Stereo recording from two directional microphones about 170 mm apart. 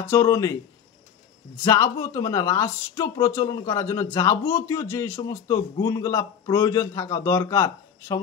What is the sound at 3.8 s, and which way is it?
A man's voice, 15° left (ahead or behind).